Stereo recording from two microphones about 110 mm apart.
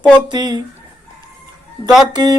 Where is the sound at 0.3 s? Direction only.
40° right (ahead or behind).